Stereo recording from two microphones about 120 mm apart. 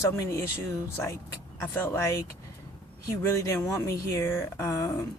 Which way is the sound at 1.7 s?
20° left (ahead or behind).